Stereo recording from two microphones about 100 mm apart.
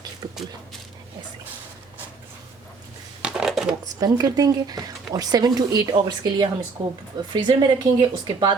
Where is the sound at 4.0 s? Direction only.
40° right (ahead or behind).